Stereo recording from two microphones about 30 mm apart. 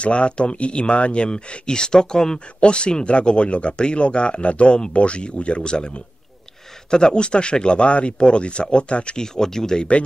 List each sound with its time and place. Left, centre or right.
0.0 s speech: left
9.1 s speech: left